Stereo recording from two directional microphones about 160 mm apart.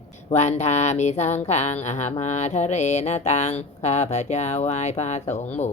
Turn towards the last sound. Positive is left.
turn(degrees=45)  # may be behind; listen again after turning